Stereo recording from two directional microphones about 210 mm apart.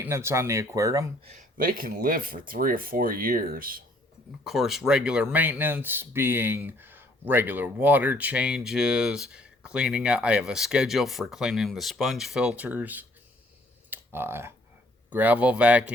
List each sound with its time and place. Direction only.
0.0 s speech: 10° right (ahead or behind)
1.2 s speech: 35° right (ahead or behind)
4.4 s speech: centre (ahead or behind)
13.9 s computer keyboard: 10° right (ahead or behind)
15.1 s speech: 10° right (ahead or behind)